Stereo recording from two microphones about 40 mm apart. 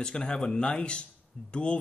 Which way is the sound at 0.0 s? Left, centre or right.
Left.